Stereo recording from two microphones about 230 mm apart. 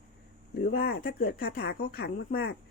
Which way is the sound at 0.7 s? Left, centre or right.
Left.